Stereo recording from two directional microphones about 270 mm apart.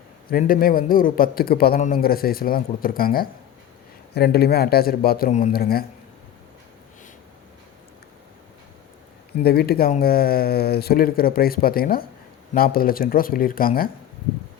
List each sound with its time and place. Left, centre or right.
0.3 s a man's voice: left
9.4 s a man's voice: left